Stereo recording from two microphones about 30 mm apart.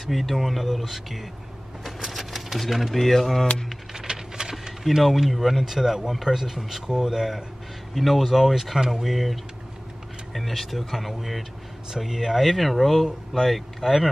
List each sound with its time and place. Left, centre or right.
0.1 s speech: centre
1.9 s typewriter: centre
3.0 s speech: centre
3.9 s a sound: right
4.8 s speech: centre
7.9 s speech: centre